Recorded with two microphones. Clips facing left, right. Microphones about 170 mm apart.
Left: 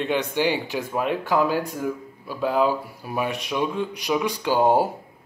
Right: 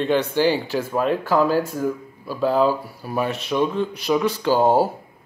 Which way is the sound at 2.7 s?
15° left (ahead or behind).